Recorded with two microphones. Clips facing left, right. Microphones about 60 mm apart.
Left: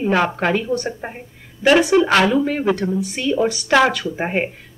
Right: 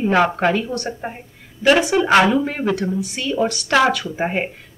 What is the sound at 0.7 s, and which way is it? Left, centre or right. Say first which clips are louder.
Speech: left 1 dB; centre.